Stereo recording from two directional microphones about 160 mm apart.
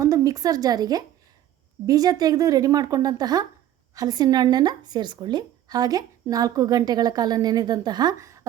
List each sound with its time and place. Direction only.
0.0 s a woman's voice: 20° right (ahead or behind)